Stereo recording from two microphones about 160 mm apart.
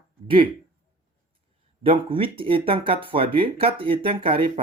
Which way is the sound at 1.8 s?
35° right (ahead or behind).